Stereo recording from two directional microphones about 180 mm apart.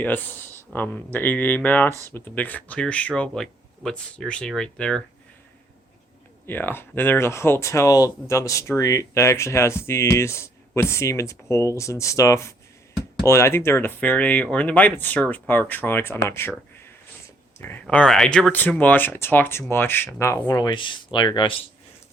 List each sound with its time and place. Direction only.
0.0 s speech: 10° left (ahead or behind)
1.9 s speech: 15° right (ahead or behind)
2.1 s speech: 10° left (ahead or behind)
6.4 s speech: 10° left (ahead or behind)
17.2 s a sound: 10° left (ahead or behind)
17.8 s speech: 5° left (ahead or behind); by 21.6 s 25° left (ahead or behind)